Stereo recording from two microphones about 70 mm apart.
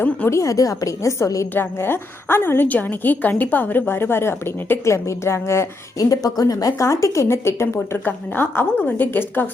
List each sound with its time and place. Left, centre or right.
0.3 s speech: left
1.5 s a woman's voice: left
6.0 s speech: left
8.0 s a woman's voice: left